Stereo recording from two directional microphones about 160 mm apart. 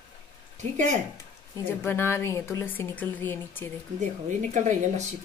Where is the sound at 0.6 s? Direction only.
50° right (ahead or behind).